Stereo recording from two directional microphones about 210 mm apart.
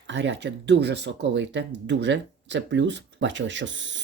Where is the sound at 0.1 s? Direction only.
60° right (ahead or behind).